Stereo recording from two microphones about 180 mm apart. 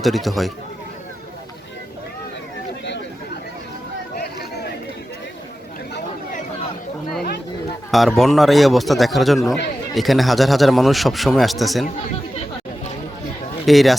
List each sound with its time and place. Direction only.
0.0 s a man's voice: centre (ahead or behind)
4.1 s a sound: 60° left (ahead or behind)
7.9 s a man's voice: centre (ahead or behind)
13.7 s a man's voice: centre (ahead or behind)